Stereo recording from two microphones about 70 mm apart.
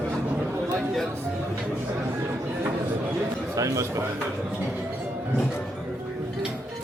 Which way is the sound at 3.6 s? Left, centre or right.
Right.